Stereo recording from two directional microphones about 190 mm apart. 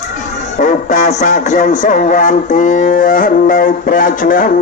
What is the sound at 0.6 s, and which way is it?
Speech, 40° left (ahead or behind).